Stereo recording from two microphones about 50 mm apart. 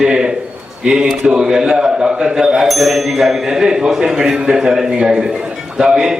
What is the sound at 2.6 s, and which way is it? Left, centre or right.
A man's voice, centre.